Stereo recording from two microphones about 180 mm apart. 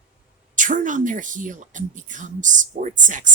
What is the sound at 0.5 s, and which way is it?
Speech, 45° right (ahead or behind).